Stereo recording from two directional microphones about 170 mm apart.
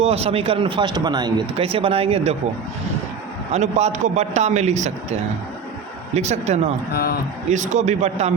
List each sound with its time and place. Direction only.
0.0 s speech: 35° right (ahead or behind)
3.5 s speech: 40° right (ahead or behind)
6.1 s speech: 40° right (ahead or behind)
6.9 s speech: 65° left (ahead or behind)
7.5 s a man's voice: 45° right (ahead or behind)